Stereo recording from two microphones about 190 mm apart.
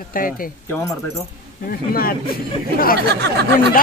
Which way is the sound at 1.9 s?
50° left (ahead or behind).